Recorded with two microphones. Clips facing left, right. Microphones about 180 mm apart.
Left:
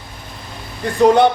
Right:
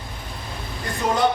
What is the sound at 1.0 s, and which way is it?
Speech, 70° left (ahead or behind).